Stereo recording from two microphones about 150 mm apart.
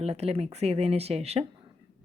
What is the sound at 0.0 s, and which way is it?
A woman's voice, 45° right (ahead or behind).